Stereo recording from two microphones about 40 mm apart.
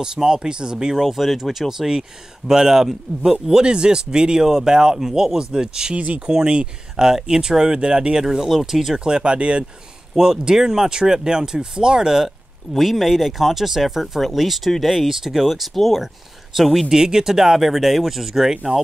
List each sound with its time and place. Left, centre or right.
0.0 s speech: centre
1.0 s speech: centre
5.9 s speech: right
6.3 s speech: right
9.0 s speech: right
10.1 s speech: centre
12.7 s speech: centre
16.9 s speech: centre